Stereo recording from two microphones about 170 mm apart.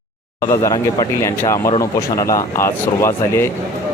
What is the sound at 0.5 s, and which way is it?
Speech, 20° left (ahead or behind).